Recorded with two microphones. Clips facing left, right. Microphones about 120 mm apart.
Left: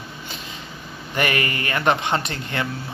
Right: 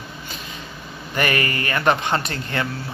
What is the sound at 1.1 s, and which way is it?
Speech, 20° left (ahead or behind).